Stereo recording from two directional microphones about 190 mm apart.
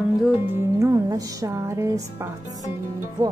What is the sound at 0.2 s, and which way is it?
Music, 10° right (ahead or behind).